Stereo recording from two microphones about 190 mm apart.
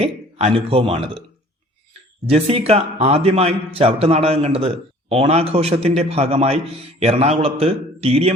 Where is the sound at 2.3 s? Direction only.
30° right (ahead or behind).